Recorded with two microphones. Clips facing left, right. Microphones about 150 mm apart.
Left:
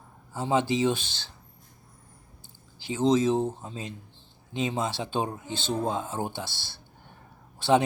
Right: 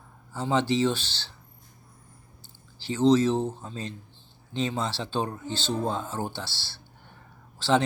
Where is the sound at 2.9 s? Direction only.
15° left (ahead or behind).